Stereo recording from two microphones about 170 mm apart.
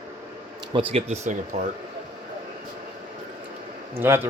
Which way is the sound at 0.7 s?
35° right (ahead or behind).